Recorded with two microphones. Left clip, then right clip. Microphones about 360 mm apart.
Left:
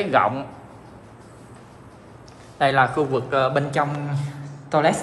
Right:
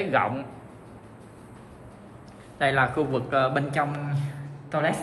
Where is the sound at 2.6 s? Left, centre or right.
Centre.